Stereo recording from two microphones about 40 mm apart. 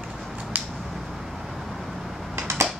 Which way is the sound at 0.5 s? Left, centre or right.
Right.